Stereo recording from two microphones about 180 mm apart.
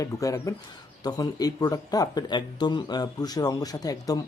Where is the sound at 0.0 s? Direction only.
20° left (ahead or behind).